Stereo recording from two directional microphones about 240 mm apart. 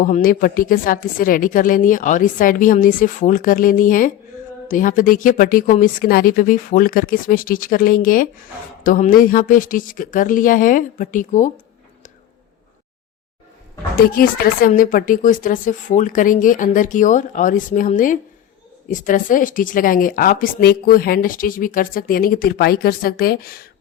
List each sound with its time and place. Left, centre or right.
0.0 s a woman's voice: left
13.9 s a woman's voice: left